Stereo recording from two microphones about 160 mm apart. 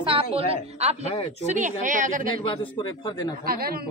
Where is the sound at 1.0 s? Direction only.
40° left (ahead or behind).